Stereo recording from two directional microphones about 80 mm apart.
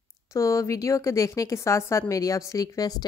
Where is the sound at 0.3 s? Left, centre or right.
Left.